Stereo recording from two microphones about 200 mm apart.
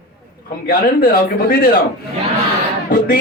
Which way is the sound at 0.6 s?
50° left (ahead or behind).